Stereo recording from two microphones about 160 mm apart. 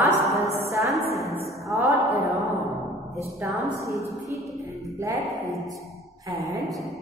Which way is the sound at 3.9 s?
20° left (ahead or behind).